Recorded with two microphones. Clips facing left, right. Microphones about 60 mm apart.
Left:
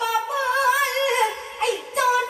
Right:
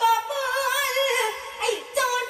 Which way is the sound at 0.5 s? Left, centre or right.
Left.